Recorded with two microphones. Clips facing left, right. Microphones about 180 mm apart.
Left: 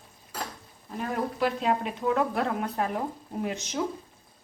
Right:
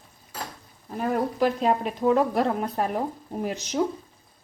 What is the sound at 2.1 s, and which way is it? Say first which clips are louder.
Speech: right 4 dB; 35° right (ahead or behind).